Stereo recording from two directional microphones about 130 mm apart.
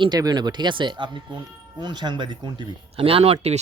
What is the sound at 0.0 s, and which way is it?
Speech, 30° right (ahead or behind).